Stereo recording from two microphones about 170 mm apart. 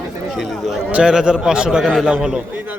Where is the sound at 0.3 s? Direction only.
Centre (ahead or behind).